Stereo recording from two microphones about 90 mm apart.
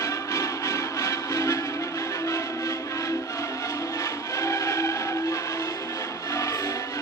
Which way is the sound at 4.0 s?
35° left (ahead or behind).